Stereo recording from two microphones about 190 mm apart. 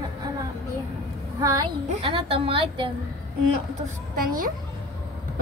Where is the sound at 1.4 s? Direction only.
20° right (ahead or behind).